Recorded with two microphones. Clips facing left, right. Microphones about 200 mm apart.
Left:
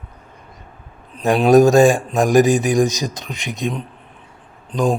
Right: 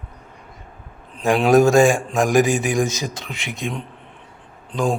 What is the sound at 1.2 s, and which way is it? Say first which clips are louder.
Speech: left 3 dB; 20° left (ahead or behind).